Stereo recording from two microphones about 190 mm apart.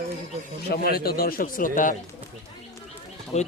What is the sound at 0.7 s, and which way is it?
A man's voice, 55° left (ahead or behind).